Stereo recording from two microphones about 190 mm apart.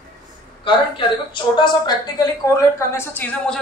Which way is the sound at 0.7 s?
25° left (ahead or behind).